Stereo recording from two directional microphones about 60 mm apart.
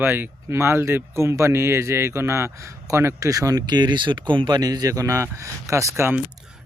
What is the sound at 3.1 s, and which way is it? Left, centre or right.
A man's voice, right.